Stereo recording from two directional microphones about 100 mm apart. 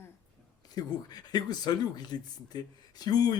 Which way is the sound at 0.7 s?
45° left (ahead or behind).